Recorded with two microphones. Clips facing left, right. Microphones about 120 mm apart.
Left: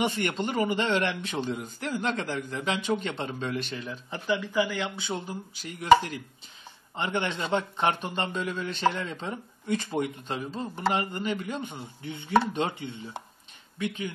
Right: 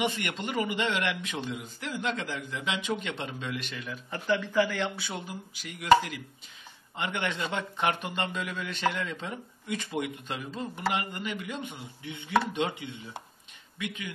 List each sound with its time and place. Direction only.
0.0 s a man's voice: 35° left (ahead or behind)
4.1 s speech: 10° left (ahead or behind)
4.9 s a man's voice: 25° left (ahead or behind)
7.0 s a man's voice: 30° left (ahead or behind)